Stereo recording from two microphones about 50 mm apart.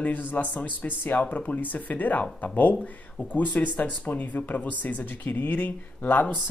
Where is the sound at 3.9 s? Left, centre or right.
Left.